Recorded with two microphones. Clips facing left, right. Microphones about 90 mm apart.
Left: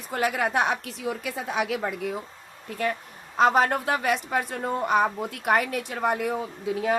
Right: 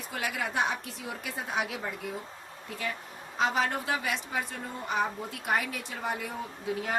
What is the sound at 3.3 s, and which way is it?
A woman's voice, 50° left (ahead or behind).